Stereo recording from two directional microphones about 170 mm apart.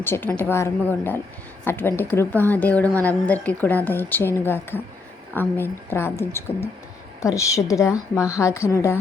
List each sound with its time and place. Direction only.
0.0 s a woman's voice: 10° left (ahead or behind)